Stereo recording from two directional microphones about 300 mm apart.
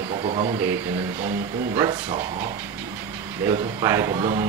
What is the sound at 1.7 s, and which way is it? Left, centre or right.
Speech, centre.